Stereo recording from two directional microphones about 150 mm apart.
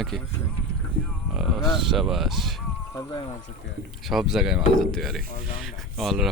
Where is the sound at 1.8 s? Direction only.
Centre (ahead or behind).